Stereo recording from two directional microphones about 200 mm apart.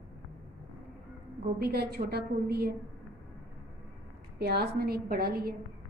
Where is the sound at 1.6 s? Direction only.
50° right (ahead or behind).